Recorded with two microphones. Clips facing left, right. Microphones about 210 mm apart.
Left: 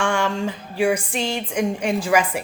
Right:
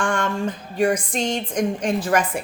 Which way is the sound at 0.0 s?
70° left (ahead or behind).